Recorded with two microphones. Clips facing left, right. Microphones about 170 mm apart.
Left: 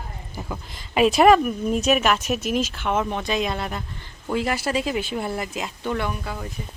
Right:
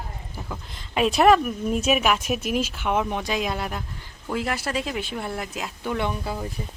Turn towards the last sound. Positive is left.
turn(degrees=-25)  # may be behind; listen again after turning